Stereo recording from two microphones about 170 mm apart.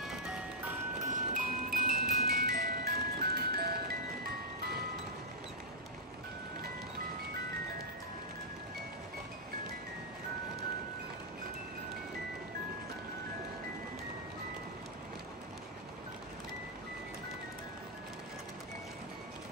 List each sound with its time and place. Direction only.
0.1 s music: 5° right (ahead or behind)
1.0 s music: 50° right (ahead or behind)